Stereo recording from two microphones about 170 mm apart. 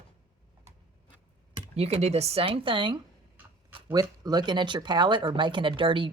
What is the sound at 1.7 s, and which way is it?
Speech, 35° right (ahead or behind).